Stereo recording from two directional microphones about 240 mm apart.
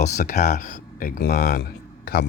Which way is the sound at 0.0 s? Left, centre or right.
Left.